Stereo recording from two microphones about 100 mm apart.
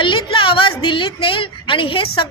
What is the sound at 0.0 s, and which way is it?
A woman's voice, 60° left (ahead or behind).